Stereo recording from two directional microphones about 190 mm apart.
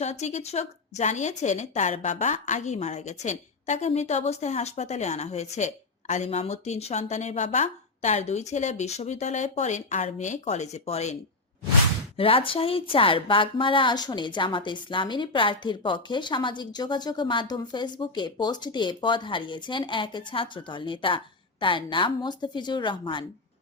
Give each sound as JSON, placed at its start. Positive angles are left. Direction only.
{"t": 0.0, "sound": "a woman's voice", "side_deg": 35}